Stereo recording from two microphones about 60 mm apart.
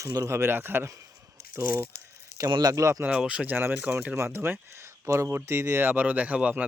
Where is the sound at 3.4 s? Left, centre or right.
Right.